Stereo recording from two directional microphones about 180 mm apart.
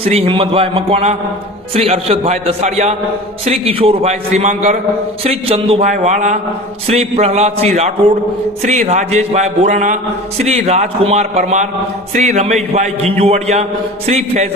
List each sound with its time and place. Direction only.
0.1 s a man's voice: 30° right (ahead or behind)